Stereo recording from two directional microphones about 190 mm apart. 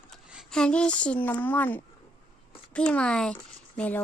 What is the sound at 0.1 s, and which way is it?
Speech, centre (ahead or behind).